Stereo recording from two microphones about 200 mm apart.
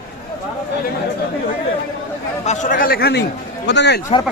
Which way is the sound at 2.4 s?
40° left (ahead or behind).